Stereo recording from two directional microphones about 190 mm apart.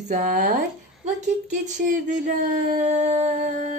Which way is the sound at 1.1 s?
40° right (ahead or behind).